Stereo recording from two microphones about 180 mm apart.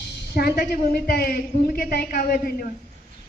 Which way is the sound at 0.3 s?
55° left (ahead or behind).